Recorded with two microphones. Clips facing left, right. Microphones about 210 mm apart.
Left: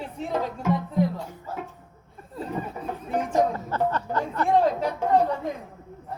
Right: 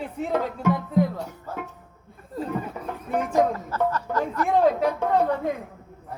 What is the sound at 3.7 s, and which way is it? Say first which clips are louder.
Speech: even; 30° left (ahead or behind).